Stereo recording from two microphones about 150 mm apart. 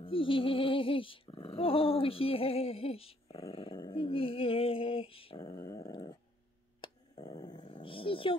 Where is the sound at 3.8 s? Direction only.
35° left (ahead or behind).